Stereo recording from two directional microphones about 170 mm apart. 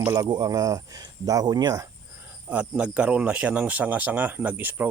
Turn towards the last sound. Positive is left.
turn(degrees=-10)  # may be behind; listen again after turning